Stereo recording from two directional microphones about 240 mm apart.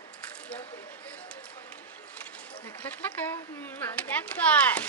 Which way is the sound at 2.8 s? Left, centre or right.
Centre.